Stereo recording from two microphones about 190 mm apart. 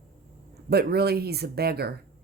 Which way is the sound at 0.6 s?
55° right (ahead or behind).